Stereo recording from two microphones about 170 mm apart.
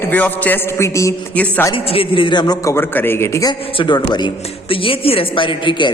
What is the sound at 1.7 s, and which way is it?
A man's voice, 30° left (ahead or behind).